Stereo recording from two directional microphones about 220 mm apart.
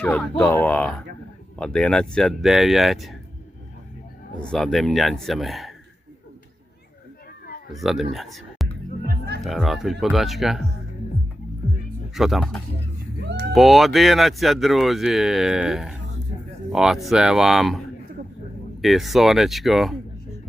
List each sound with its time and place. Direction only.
0.0 s speech: 5° left (ahead or behind)
4.4 s speech: centre (ahead or behind)
7.7 s speech: centre (ahead or behind)
8.1 s a sound: centre (ahead or behind)
9.0 s music: 50° right (ahead or behind)
9.4 s speech: centre (ahead or behind)
12.1 s speech: centre (ahead or behind)
13.2 s cat: 50° right (ahead or behind)
13.5 s speech: centre (ahead or behind)